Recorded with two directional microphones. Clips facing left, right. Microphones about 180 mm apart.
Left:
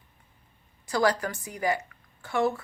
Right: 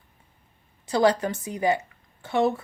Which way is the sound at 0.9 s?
25° right (ahead or behind).